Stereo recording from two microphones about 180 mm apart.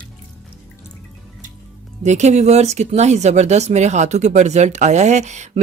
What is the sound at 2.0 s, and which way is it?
Speech, 40° right (ahead or behind).